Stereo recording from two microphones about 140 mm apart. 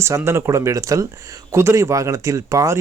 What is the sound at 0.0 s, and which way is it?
Speech, 20° right (ahead or behind).